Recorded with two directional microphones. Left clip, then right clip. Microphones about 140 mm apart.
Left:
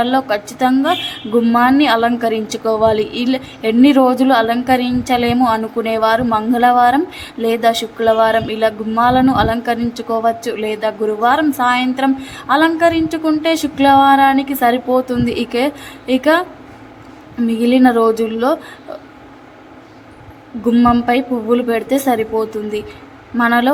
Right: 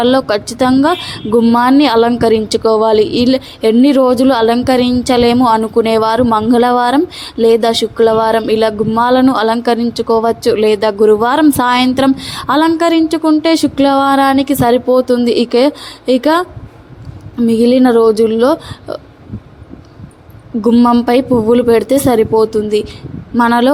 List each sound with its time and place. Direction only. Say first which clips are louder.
0.0 s a woman's voice: right 4 dB; 65° right (ahead or behind)
13.1 s a woman's voice: right 4 dB; 40° right (ahead or behind)
17.5 s speech: right 4 dB; 55° right (ahead or behind)
20.7 s speech: right 3 dB; 45° right (ahead or behind)
21.1 s a woman's voice: right 5 dB; 60° right (ahead or behind)